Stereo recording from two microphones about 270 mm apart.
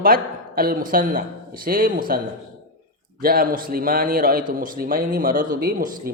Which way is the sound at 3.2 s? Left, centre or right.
Right.